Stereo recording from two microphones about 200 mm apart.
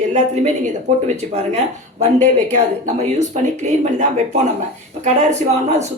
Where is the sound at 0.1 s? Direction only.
35° right (ahead or behind).